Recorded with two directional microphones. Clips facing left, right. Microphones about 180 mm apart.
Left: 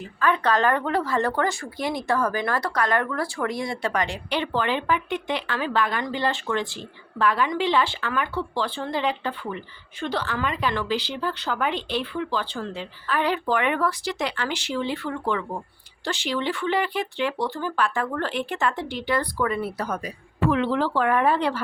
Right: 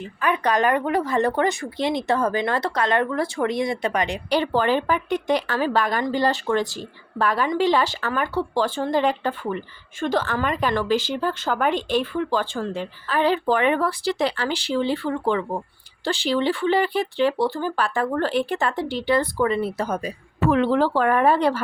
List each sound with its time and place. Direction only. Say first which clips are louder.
0.2 s speech: right 1 dB; 15° right (ahead or behind)
4.3 s speech: right 6 dB; 40° right (ahead or behind)
13.1 s speech: right 3 dB; 30° right (ahead or behind)
20.4 s speech: right 3 dB; 40° right (ahead or behind)